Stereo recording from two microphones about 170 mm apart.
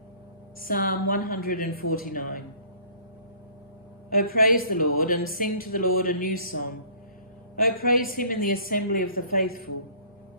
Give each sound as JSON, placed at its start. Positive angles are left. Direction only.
{"t": 0.6, "sound": "speech", "side_deg": 55}
{"t": 4.1, "sound": "speech", "side_deg": 60}